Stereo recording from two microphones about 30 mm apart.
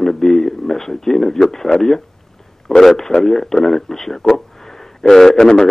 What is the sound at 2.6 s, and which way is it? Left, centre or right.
A man's voice, centre.